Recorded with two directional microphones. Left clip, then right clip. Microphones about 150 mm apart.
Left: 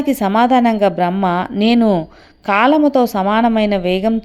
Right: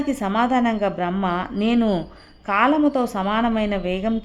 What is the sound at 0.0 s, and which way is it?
A woman's voice, 30° left (ahead or behind).